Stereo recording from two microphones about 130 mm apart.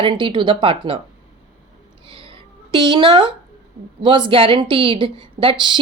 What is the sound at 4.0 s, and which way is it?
A woman's voice, 40° right (ahead or behind).